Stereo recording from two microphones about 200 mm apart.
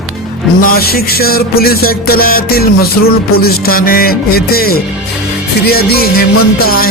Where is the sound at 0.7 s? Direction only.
50° left (ahead or behind).